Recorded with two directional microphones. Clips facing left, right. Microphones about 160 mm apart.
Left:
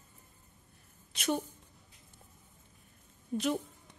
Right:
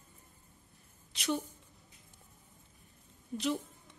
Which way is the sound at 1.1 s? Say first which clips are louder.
Left 2 dB; 50° left (ahead or behind).